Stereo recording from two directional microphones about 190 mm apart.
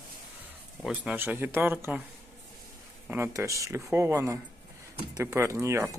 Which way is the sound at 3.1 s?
15° right (ahead or behind).